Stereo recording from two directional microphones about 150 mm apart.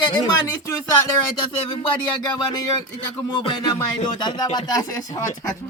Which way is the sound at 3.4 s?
30° left (ahead or behind).